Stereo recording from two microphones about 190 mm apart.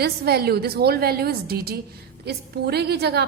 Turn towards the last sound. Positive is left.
turn(degrees=-60)  # may be behind; listen again after turning